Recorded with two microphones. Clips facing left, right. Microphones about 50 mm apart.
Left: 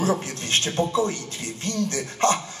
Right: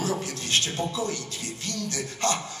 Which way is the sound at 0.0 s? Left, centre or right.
Left.